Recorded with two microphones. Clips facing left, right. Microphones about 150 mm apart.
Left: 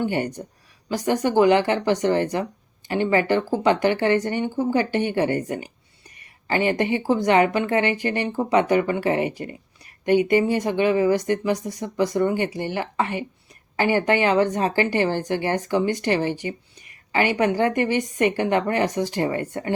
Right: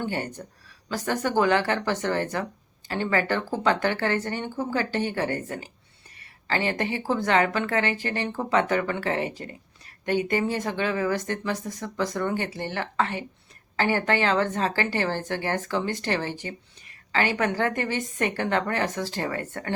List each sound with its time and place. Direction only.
0.0 s speech: 15° left (ahead or behind)